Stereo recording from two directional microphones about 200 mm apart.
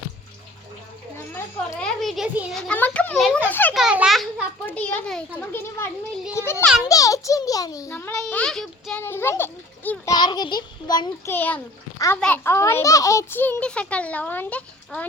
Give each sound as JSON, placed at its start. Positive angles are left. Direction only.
{"t": 1.5, "sound": "a child's voice", "side_deg": 5}
{"t": 3.5, "sound": "a sound", "side_deg": 10}
{"t": 3.8, "sound": "a sound", "side_deg": -5}
{"t": 6.3, "sound": "a child's voice", "side_deg": 10}
{"t": 10.2, "sound": "a child's voice", "side_deg": 20}
{"t": 11.3, "sound": "a child's voice", "side_deg": 10}